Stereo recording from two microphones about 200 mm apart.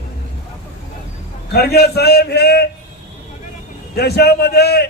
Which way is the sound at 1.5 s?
55° left (ahead or behind).